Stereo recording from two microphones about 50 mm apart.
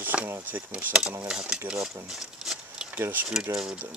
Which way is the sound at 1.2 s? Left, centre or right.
Centre.